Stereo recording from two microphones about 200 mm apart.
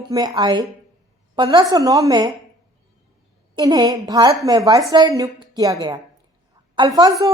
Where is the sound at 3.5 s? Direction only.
20° right (ahead or behind).